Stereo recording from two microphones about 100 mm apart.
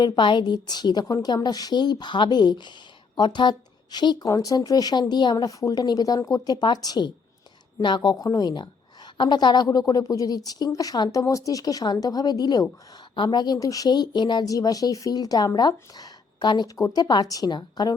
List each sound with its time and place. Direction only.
0.0 s a woman's voice: 50° left (ahead or behind)